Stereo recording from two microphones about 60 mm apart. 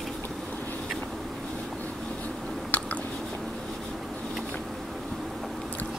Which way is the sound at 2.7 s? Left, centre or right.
Left.